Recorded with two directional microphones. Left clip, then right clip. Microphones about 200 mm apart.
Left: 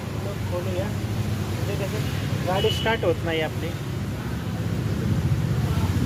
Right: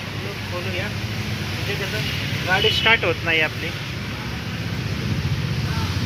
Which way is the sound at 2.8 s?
15° left (ahead or behind).